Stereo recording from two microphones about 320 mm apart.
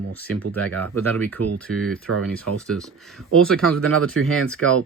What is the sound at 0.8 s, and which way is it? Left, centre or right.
Speech, centre.